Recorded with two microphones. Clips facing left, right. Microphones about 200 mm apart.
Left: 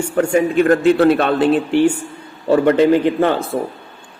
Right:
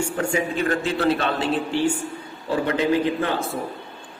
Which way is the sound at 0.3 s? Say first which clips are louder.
Left 10 dB; 55° left (ahead or behind).